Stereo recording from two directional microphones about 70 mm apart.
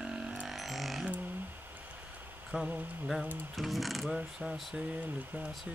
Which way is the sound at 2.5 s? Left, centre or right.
Centre.